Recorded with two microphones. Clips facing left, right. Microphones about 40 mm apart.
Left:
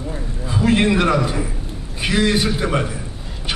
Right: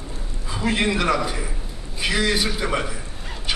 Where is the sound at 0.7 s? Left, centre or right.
Left.